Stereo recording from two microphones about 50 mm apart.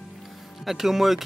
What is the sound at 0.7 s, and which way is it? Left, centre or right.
Speech, centre.